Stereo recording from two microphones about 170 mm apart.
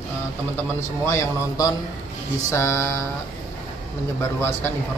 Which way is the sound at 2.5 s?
15° left (ahead or behind).